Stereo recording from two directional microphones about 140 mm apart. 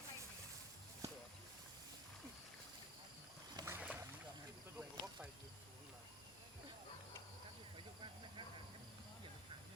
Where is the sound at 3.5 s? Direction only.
20° right (ahead or behind).